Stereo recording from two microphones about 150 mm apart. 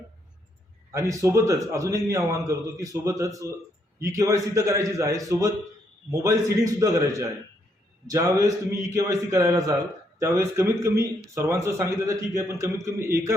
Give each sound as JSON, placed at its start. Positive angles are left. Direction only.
{"t": 0.9, "sound": "a man's voice", "side_deg": -20}